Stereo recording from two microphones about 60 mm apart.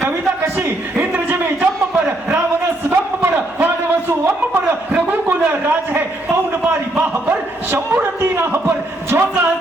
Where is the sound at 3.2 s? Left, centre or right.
Right.